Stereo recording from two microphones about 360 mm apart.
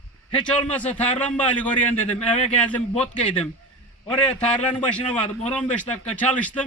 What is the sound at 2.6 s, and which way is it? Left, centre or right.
Speech, centre.